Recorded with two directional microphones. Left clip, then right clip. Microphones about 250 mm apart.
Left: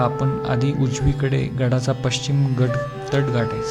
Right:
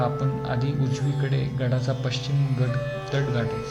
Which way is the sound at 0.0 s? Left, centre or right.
Centre.